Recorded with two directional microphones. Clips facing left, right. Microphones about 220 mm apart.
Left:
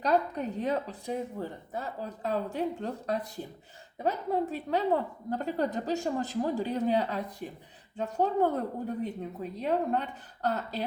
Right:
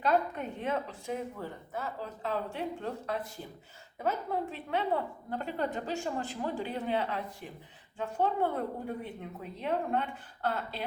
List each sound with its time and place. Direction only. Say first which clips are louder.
0.0 s a woman's voice: left 2 dB; 35° left (ahead or behind)
4.5 s a woman's voice: left 4 dB; 40° left (ahead or behind)